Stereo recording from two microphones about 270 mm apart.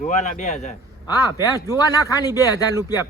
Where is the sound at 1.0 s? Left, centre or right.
Centre.